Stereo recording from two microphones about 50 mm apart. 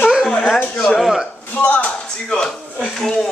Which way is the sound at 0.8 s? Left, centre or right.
Centre.